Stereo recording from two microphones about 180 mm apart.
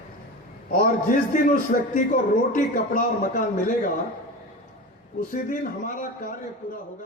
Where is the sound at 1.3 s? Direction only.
50° left (ahead or behind).